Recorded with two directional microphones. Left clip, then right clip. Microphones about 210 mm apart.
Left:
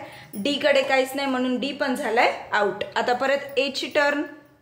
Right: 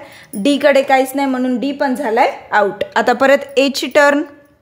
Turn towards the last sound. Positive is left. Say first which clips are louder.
# right 10 dB
turn(degrees=-50)  # may be behind; listen again after turning